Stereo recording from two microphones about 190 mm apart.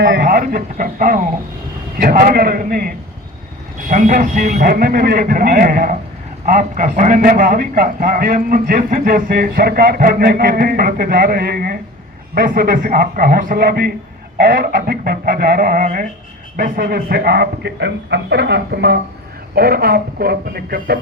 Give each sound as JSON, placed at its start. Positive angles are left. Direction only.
{"t": 0.0, "sound": "a man's voice", "side_deg": -55}